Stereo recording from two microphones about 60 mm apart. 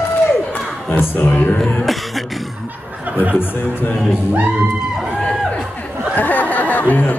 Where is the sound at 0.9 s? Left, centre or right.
Left.